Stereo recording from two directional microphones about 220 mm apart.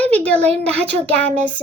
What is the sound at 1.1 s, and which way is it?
Child singing, 5° left (ahead or behind).